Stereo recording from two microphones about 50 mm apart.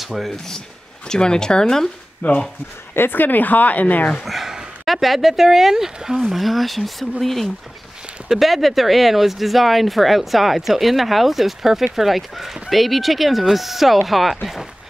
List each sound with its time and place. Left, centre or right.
0.0 s speech: centre
1.0 s speech: centre
2.2 s a woman's voice: left
4.2 s speech: centre